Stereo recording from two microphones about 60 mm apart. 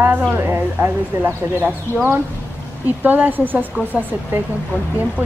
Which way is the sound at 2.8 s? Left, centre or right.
Right.